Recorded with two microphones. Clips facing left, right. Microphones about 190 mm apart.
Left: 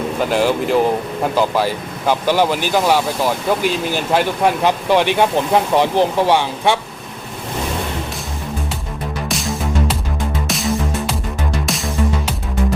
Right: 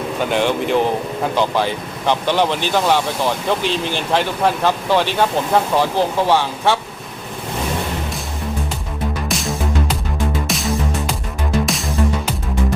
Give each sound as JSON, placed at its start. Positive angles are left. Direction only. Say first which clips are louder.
{"t": 0.2, "sound": "speech", "louder": "left 1 dB", "side_deg": 5}
{"t": 9.3, "sound": "music", "louder": "left 2 dB", "side_deg": 0}